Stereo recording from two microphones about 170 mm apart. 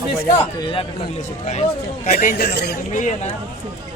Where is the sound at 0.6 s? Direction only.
30° left (ahead or behind).